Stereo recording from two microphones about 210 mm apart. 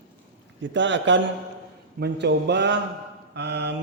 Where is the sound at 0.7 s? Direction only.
60° right (ahead or behind).